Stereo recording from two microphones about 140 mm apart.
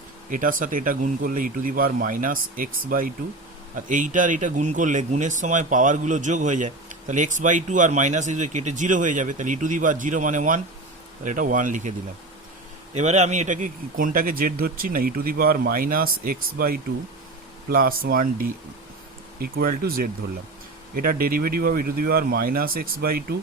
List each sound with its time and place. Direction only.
0.3 s speech: 75° right (ahead or behind)
3.8 s a man's voice: 70° right (ahead or behind); by 23.2 s 90° right